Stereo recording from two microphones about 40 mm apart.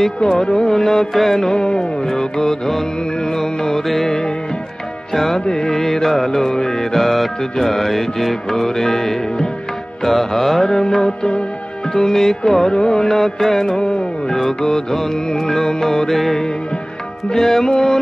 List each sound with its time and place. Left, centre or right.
0.4 s music: centre
11.9 s music: centre
13.7 s music: centre
14.3 s music: centre